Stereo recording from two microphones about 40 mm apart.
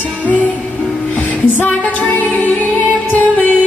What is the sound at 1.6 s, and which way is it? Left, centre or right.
Music, left.